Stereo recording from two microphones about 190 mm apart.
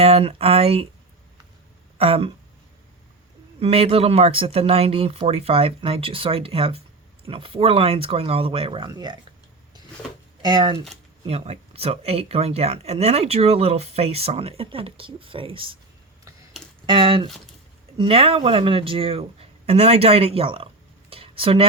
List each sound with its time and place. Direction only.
0.0 s speech: 30° right (ahead or behind)
2.0 s speech: 30° right (ahead or behind)
3.6 s speech: 30° right (ahead or behind)
10.4 s speech: 20° right (ahead or behind)
16.8 s speech: 25° right (ahead or behind)
21.1 s a sound: 30° right (ahead or behind)